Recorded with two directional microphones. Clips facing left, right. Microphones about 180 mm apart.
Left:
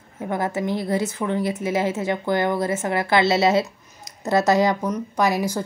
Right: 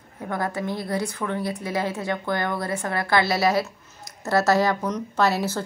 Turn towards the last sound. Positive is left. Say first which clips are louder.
# left 1 dB
turn(degrees=10)  # may be behind; listen again after turning